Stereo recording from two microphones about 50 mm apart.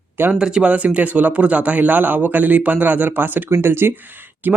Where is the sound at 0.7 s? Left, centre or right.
Right.